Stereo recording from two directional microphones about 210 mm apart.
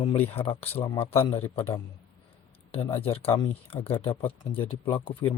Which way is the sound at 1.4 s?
10° left (ahead or behind).